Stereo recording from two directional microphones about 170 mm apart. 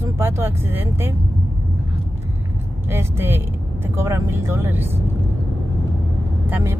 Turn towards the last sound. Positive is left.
turn(degrees=-10)  # may be behind; listen again after turning